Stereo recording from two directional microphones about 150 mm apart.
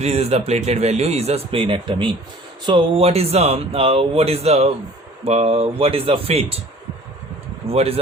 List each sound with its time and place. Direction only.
0.0 s a man's voice: 45° right (ahead or behind)
7.7 s speech: 40° right (ahead or behind)